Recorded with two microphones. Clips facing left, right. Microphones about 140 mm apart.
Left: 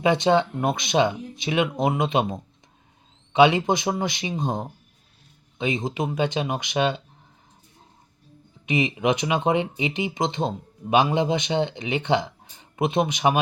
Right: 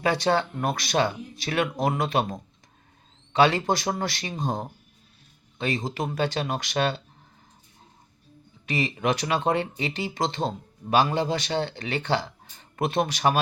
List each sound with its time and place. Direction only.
0.0 s speech: 20° left (ahead or behind)
8.6 s speech: 20° left (ahead or behind)